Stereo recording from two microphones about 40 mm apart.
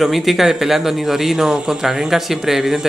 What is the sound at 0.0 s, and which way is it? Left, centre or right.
Speech, centre.